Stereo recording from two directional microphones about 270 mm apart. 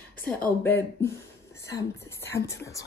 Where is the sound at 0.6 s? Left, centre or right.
Centre.